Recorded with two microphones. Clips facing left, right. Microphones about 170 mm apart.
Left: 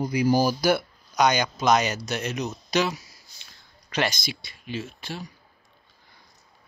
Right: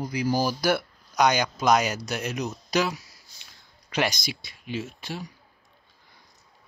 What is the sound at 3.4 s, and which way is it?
Speech, 10° right (ahead or behind).